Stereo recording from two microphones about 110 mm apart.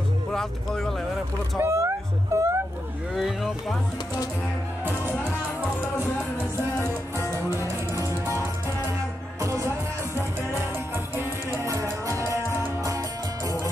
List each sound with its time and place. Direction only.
0.3 s speech: 5° left (ahead or behind)
1.6 s speech: 25° right (ahead or behind)
3.2 s speech: 5° right (ahead or behind)
6.8 s music: 25° left (ahead or behind)
7.3 s music: 25° right (ahead or behind)
11.1 s music: 30° right (ahead or behind)